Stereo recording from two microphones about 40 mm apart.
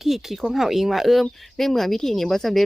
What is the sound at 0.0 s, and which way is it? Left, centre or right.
Speech, centre.